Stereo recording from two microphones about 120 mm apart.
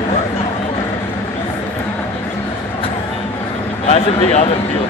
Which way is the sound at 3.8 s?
70° left (ahead or behind).